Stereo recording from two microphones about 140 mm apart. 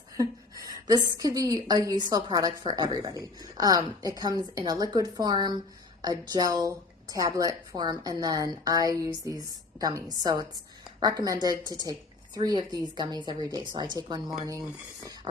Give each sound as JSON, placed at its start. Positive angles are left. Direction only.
{"t": 0.2, "sound": "a sound", "side_deg": -25}
{"t": 1.1, "sound": "a woman's voice", "side_deg": -25}
{"t": 11.0, "sound": "a woman's voice", "side_deg": -25}